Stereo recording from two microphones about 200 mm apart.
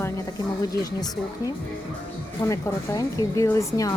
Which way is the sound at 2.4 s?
15° left (ahead or behind).